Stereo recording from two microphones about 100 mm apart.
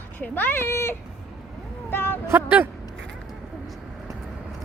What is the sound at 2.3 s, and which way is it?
Speech, 20° right (ahead or behind).